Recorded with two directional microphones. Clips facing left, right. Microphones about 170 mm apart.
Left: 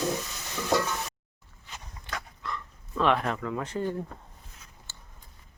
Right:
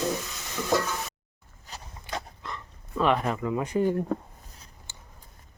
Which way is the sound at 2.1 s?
20° right (ahead or behind).